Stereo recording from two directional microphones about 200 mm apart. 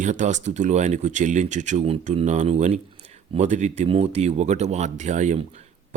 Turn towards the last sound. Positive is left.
turn(degrees=-35)  # may be behind; listen again after turning